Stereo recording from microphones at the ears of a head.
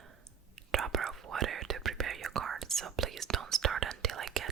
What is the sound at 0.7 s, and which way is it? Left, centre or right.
Whispering, right.